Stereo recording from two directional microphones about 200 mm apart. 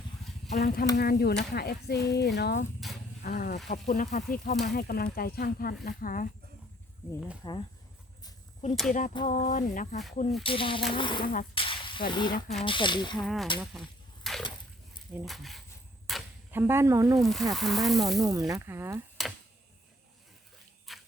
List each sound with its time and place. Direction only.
0.5 s speech: 55° left (ahead or behind)
7.4 s speech: 25° left (ahead or behind)
8.9 s speech: 40° left (ahead or behind)
10.4 s speech: 25° left (ahead or behind)
11.5 s a sound: 25° left (ahead or behind)
12.1 s speech: 25° left (ahead or behind)
13.2 s speech: centre (ahead or behind)
14.3 s a sound: centre (ahead or behind)
15.1 s speech: centre (ahead or behind)
16.0 s a sound: centre (ahead or behind)
16.6 s speech: 10° right (ahead or behind)
17.2 s speech: centre (ahead or behind)
18.2 s speech: 15° right (ahead or behind)
20.9 s a sound: centre (ahead or behind)